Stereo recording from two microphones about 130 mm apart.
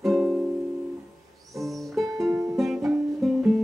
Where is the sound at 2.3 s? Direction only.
25° right (ahead or behind).